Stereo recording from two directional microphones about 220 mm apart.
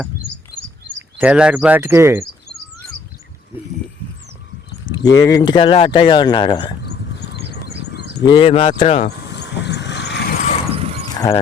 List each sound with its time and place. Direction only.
1.2 s speech: 5° right (ahead or behind)
5.0 s speech: 15° left (ahead or behind)
6.8 s a sound: 50° left (ahead or behind)
8.2 s speech: 20° left (ahead or behind)
9.0 s vehicle: 50° left (ahead or behind)
10.8 s mechanisms: 30° right (ahead or behind)